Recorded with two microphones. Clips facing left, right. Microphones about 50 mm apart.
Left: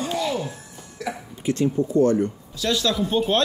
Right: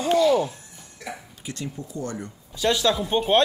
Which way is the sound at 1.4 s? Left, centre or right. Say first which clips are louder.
Left 16 dB; left.